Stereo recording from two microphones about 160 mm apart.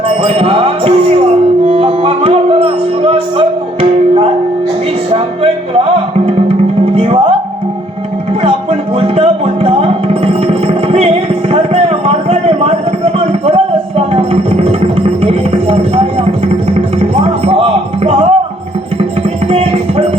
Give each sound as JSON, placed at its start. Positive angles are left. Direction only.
{"t": 0.2, "sound": "music", "side_deg": -35}
{"t": 6.8, "sound": "music", "side_deg": -35}
{"t": 9.0, "sound": "music", "side_deg": -35}
{"t": 13.1, "sound": "a sound", "side_deg": -35}
{"t": 14.1, "sound": "music", "side_deg": -35}
{"t": 19.5, "sound": "music", "side_deg": -40}